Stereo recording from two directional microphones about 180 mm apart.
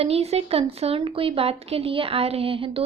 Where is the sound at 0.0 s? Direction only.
35° right (ahead or behind).